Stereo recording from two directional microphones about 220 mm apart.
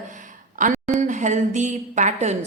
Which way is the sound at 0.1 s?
35° right (ahead or behind).